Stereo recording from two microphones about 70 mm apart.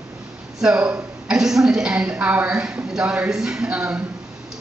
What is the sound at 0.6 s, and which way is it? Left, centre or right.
A woman's voice, centre.